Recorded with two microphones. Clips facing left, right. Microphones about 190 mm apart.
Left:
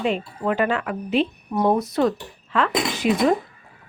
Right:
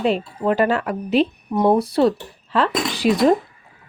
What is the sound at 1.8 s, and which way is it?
Speech, 30° right (ahead or behind).